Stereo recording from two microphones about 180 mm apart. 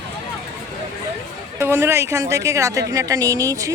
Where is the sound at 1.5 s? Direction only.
15° right (ahead or behind).